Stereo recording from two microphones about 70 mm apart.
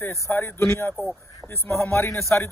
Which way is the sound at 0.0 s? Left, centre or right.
Left.